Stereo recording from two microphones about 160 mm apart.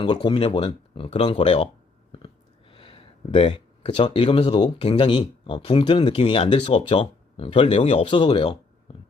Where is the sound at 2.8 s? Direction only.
35° left (ahead or behind).